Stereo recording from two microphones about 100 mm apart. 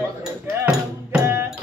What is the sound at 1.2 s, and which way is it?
Music, 25° right (ahead or behind).